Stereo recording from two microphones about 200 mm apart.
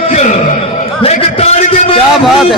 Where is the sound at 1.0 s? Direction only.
30° left (ahead or behind).